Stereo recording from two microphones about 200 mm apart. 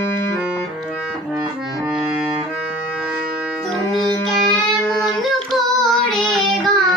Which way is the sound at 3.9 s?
25° left (ahead or behind).